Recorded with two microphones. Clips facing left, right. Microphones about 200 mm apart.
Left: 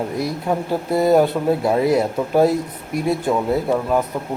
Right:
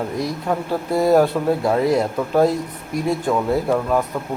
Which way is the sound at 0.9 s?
Centre (ahead or behind).